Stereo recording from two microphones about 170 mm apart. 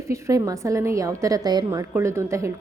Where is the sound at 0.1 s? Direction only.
20° right (ahead or behind).